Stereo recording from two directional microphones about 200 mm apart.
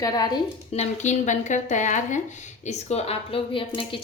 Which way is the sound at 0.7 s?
35° left (ahead or behind).